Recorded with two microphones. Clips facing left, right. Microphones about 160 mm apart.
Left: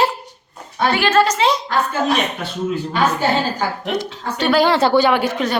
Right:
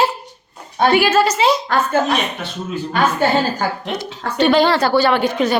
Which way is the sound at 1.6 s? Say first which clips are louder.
Right 2 dB; 55° right (ahead or behind).